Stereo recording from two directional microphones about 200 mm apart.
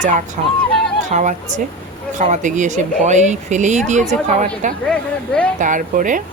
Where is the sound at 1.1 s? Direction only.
40° right (ahead or behind).